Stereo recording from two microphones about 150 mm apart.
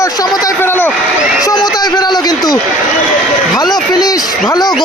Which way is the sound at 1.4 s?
25° left (ahead or behind).